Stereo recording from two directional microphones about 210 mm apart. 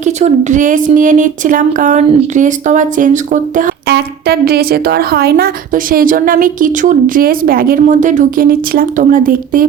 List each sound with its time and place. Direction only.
0.0 s a woman's voice: 35° right (ahead or behind)